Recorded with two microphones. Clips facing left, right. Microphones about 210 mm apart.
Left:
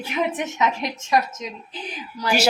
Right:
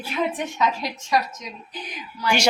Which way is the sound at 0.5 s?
20° left (ahead or behind).